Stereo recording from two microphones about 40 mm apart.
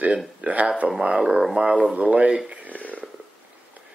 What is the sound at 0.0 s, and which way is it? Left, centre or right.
Speech, right.